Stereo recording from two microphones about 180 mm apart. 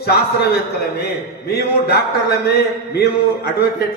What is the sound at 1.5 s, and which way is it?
A man's voice, 60° left (ahead or behind).